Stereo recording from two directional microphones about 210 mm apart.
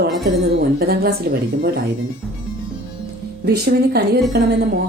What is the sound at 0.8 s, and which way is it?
Speech, 45° right (ahead or behind).